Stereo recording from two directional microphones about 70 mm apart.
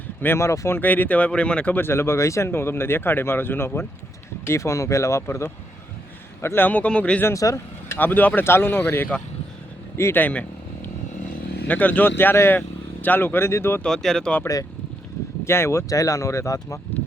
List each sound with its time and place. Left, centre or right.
0.3 s speech: left
0.8 s speech: left
1.7 s speech: left
4.4 s a man's voice: left
6.7 s speech: left
7.3 s speech: left
7.9 s speech: left
10.2 s speech: left
11.7 s speech: left
13.8 s speech: centre
15.4 s speech: left
15.9 s speech: left